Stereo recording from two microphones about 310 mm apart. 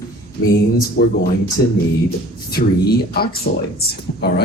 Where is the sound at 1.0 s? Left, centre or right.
Left.